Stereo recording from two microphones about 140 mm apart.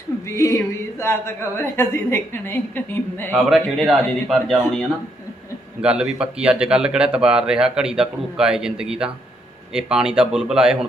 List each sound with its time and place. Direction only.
0.3 s a woman's voice: 20° left (ahead or behind)
3.3 s speech: centre (ahead or behind)